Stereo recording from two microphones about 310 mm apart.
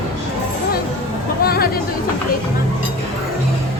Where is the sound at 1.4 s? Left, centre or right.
Left.